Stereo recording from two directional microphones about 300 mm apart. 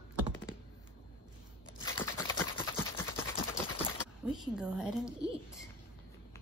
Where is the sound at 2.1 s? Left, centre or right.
Centre.